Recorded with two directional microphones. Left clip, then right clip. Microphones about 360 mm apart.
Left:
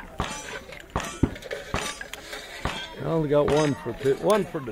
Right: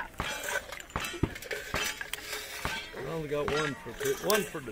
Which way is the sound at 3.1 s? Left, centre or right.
Centre.